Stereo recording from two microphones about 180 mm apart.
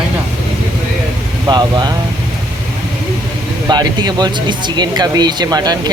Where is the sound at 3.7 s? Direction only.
25° right (ahead or behind).